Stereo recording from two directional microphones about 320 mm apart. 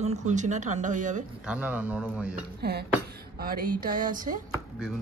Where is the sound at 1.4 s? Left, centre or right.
Centre.